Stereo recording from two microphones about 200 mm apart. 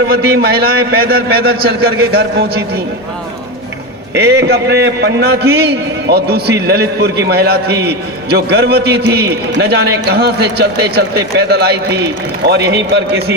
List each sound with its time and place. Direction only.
0.1 s a man's voice: 50° right (ahead or behind)
4.1 s a man's voice: 55° right (ahead or behind)